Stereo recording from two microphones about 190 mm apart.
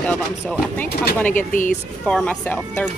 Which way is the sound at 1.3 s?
45° left (ahead or behind).